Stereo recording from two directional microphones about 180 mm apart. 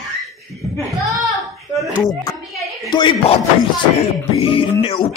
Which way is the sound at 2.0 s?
20° left (ahead or behind).